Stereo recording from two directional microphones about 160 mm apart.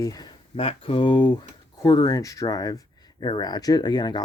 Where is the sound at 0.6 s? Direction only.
35° left (ahead or behind).